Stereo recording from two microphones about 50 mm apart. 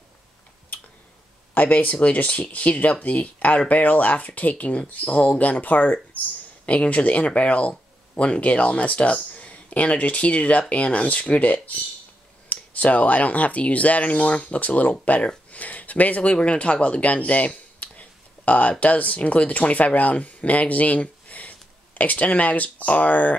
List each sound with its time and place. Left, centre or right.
1.5 s speech: left